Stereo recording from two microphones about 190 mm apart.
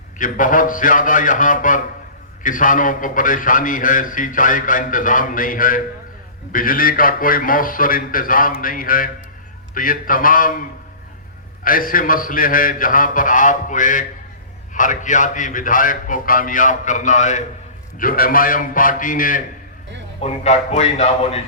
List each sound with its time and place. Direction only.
0.2 s a man's voice: 45° left (ahead or behind)
11.6 s a man's voice: 45° left (ahead or behind)
20.2 s speech: 35° left (ahead or behind)